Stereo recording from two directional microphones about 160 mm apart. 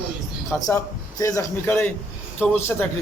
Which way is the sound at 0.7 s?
20° left (ahead or behind).